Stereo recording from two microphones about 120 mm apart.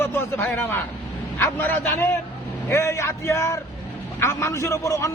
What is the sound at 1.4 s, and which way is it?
A man's voice, 15° left (ahead or behind).